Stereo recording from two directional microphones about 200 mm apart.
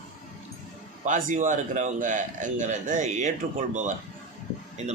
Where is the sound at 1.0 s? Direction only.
40° right (ahead or behind).